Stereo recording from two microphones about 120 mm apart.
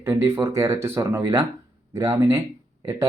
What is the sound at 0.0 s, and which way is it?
Speech, 20° right (ahead or behind).